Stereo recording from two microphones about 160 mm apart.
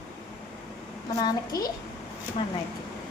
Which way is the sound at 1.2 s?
25° left (ahead or behind).